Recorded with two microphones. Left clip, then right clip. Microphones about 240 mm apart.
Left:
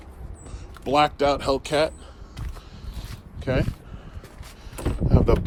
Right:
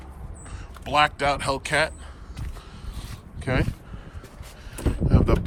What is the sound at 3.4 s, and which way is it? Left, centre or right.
Speech, centre.